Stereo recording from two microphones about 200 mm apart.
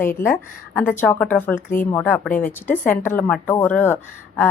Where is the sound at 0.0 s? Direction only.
10° left (ahead or behind).